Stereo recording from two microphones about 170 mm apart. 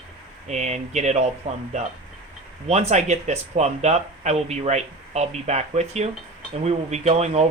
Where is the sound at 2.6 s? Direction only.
40° right (ahead or behind).